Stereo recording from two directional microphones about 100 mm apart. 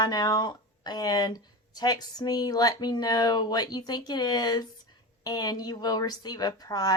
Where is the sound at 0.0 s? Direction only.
40° left (ahead or behind).